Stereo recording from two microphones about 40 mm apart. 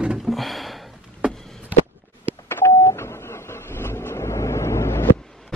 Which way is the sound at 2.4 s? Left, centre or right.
Left.